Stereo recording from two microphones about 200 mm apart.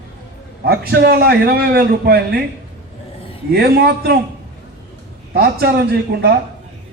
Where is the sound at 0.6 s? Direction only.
55° right (ahead or behind).